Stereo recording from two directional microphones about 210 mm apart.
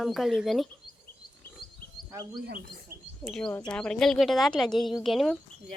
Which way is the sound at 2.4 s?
45° right (ahead or behind).